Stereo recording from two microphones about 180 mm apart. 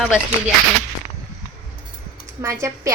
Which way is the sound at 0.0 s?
5° right (ahead or behind).